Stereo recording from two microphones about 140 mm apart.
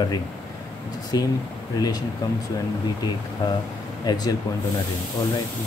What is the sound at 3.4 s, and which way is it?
Speech, 30° left (ahead or behind).